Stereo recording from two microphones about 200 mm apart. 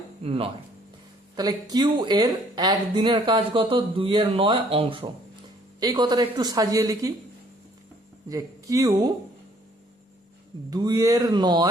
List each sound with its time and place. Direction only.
0.2 s speech: 30° right (ahead or behind)
8.3 s speech: 15° right (ahead or behind)
10.7 s speech: 20° right (ahead or behind)